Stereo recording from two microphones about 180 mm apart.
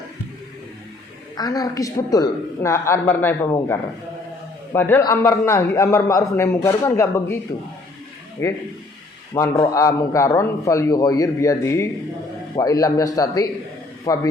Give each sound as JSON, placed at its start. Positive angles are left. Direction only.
{"t": 1.4, "sound": "a man's voice", "side_deg": 20}
{"t": 4.7, "sound": "a man's voice", "side_deg": 10}
{"t": 8.4, "sound": "a man's voice", "side_deg": 15}